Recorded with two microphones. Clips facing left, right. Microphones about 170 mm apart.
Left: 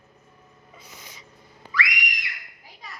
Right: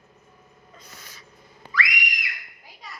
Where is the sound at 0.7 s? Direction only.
10° left (ahead or behind).